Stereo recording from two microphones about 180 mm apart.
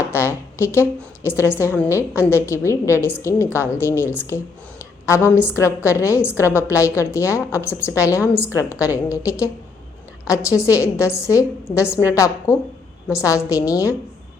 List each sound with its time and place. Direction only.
0.6 s a woman's voice: 15° left (ahead or behind)